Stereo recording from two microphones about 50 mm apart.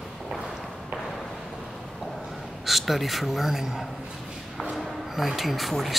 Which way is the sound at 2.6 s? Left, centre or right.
Centre.